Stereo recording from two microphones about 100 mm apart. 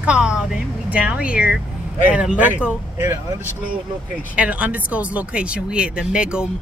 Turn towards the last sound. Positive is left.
turn(degrees=-10)  # may be behind; listen again after turning